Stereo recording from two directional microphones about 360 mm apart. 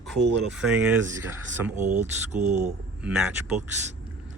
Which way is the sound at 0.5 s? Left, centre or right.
Centre.